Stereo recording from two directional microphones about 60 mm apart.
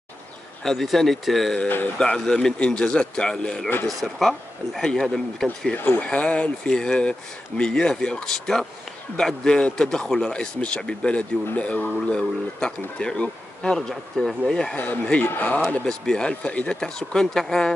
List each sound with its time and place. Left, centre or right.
0.7 s speech: centre
5.8 s speech: left
6.0 s speech: centre
12.1 s speech: centre
15.2 s speech: left; by 17.7 s centre